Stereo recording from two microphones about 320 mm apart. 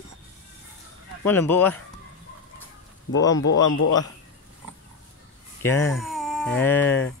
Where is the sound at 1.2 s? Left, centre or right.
Centre.